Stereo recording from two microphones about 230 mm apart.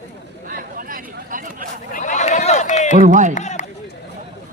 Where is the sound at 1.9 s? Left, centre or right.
Left.